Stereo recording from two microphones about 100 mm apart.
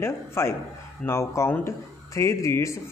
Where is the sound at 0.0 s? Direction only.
25° left (ahead or behind).